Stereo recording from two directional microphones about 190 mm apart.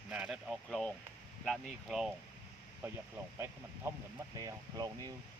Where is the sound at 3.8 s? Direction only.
15° right (ahead or behind).